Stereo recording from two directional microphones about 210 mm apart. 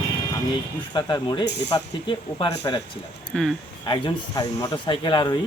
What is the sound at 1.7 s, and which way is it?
Speech, 20° left (ahead or behind).